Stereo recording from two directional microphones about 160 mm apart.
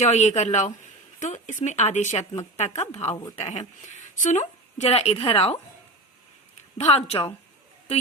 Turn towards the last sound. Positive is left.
turn(degrees=35)  # may be behind; listen again after turning